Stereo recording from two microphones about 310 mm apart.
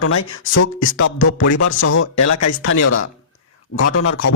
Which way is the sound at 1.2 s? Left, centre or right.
Left.